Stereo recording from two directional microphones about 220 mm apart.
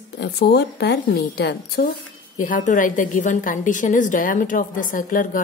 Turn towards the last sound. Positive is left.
turn(degrees=40)  # may be behind; listen again after turning